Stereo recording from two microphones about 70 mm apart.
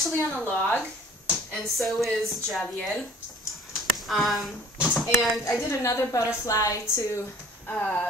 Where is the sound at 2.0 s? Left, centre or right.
Centre.